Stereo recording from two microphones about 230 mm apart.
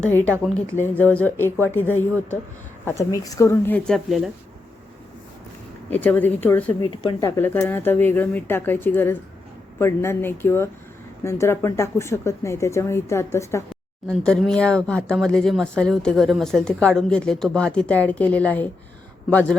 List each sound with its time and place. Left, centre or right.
0.0 s speech: centre
3.2 s speech: centre
5.9 s speech: centre
6.9 s speech: left
7.3 s speech: centre